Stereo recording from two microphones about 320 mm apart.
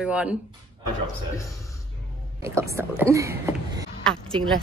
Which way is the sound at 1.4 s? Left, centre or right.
Centre.